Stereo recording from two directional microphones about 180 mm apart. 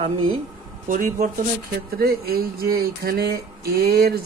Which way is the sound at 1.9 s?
60° right (ahead or behind).